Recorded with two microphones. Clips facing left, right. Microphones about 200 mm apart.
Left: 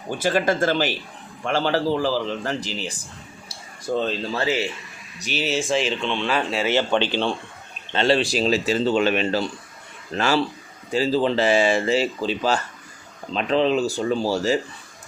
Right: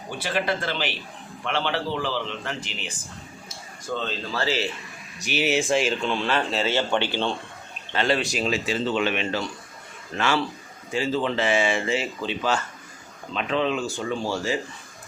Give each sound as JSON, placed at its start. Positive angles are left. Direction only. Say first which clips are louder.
{"t": 0.2, "sound": "speech", "louder": "left 6 dB", "side_deg": 45}
{"t": 5.2, "sound": "speech", "louder": "right 1 dB", "side_deg": -15}
{"t": 7.9, "sound": "speech", "louder": "left 4 dB", "side_deg": 30}